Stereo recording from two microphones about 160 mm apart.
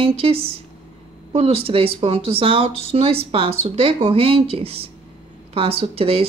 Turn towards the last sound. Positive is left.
turn(degrees=-35)  # may be behind; listen again after turning